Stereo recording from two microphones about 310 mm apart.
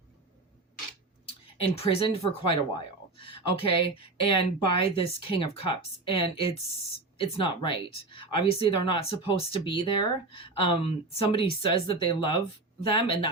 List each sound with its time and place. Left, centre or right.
1.7 s a woman's voice: centre
7.2 s a woman's voice: centre